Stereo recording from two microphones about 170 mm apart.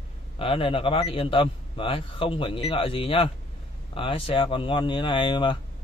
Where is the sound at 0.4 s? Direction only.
30° left (ahead or behind).